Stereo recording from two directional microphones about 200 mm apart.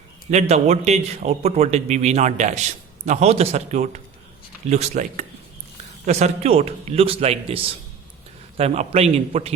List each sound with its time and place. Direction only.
0.3 s a man's voice: 35° right (ahead or behind)